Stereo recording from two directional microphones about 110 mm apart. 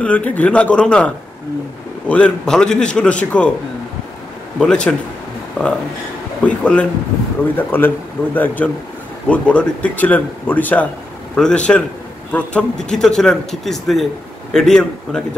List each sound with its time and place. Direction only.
0.0 s speech: 10° left (ahead or behind)
4.6 s speech: 10° left (ahead or behind)
6.4 s a man's voice: 10° left (ahead or behind)